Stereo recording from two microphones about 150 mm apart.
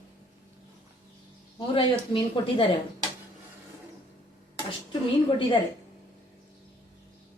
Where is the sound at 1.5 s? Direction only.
30° left (ahead or behind).